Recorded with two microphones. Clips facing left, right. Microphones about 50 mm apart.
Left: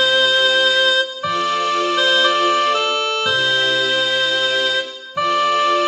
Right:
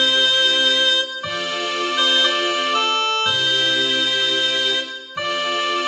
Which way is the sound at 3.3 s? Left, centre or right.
Left.